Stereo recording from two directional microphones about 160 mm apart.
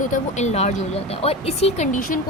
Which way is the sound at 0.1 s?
45° left (ahead or behind).